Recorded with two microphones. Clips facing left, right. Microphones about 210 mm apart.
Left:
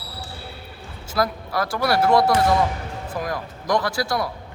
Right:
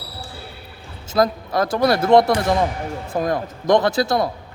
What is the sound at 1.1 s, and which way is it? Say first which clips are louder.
Speech: right 5 dB; 20° right (ahead or behind).